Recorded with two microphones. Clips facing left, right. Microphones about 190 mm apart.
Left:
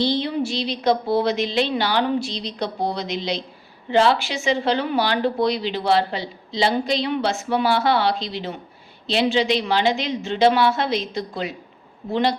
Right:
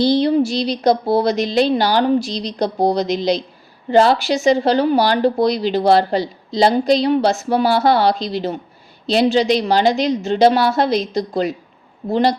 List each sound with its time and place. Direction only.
0.0 s speech: 40° right (ahead or behind)